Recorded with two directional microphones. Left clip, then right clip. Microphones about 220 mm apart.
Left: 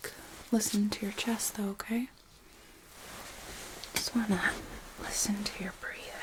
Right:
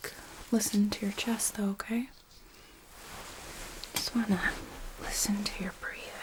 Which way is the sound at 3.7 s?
15° right (ahead or behind).